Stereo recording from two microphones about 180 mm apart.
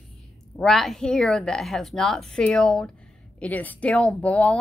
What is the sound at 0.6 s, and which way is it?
A woman's voice, centre (ahead or behind).